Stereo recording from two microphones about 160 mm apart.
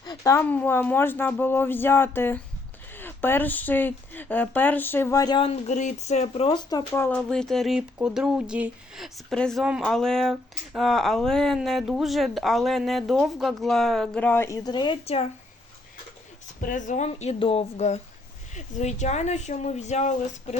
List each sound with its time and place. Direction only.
0.0 s speech: 20° left (ahead or behind)
5.4 s speech: 40° left (ahead or behind)
6.9 s speech: 10° left (ahead or behind); by 15.3 s 40° left (ahead or behind)
16.6 s speech: 55° left (ahead or behind)